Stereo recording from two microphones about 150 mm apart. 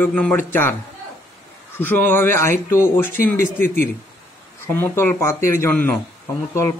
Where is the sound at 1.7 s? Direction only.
15° left (ahead or behind).